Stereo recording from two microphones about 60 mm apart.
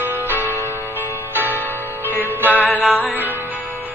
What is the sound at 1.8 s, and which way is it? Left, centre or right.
Music, right.